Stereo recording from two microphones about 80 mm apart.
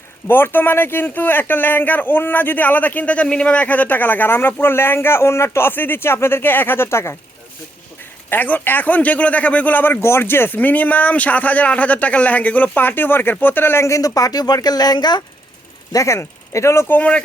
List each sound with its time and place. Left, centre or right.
0.3 s a man's voice: left
8.3 s a man's voice: left
15.9 s speech: left
16.9 s speech: centre